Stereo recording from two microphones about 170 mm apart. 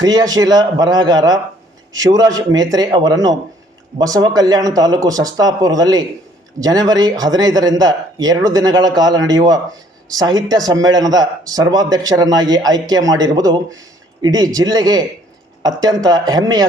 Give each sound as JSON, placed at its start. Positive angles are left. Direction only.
{"t": 0.0, "sound": "speech", "side_deg": -20}